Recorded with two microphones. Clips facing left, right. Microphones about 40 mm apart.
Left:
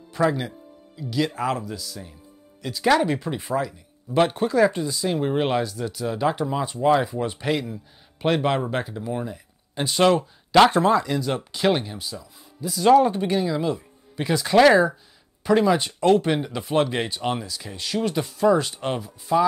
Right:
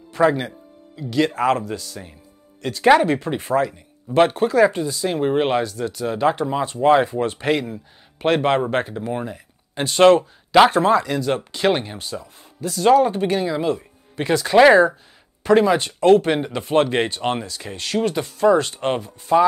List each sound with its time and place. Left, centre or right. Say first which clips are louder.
0.2 s speech: right 5 dB; right
5.0 s speech: right 4 dB; right
6.6 s speech: right 5 dB; right
11.5 s speech: even; right
12.0 s speech: right 4 dB; right
12.9 s speech: even; right
14.4 s speech: right 3 dB; centre
15.8 s speech: right 5 dB; right
17.5 s speech: right 3 dB; right
18.4 s speech: right 4 dB; centre